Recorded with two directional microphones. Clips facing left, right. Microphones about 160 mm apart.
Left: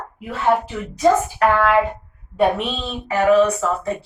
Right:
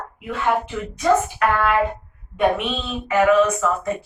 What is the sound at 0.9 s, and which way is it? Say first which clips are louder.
Speech: left 2 dB; 40° left (ahead or behind).